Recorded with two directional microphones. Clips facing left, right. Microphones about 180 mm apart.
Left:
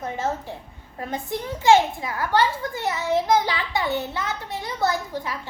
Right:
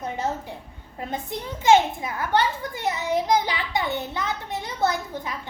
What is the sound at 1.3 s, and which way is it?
A child's voice, 20° right (ahead or behind).